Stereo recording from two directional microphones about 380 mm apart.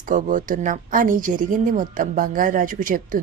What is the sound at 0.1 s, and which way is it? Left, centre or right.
A woman's voice, right.